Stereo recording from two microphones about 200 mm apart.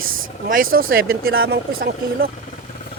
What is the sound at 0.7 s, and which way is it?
Speech, 55° right (ahead or behind).